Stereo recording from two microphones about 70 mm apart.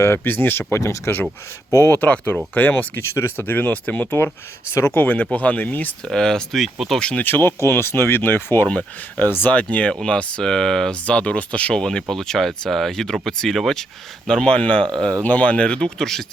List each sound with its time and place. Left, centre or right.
0.0 s speech: left
0.7 s speech: left
1.9 s speech: left
4.7 s speech: left
6.1 s speech: centre
7.2 s speech: left
9.7 s speech: centre